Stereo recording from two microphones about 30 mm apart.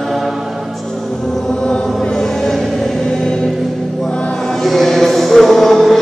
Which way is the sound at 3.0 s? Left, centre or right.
Centre.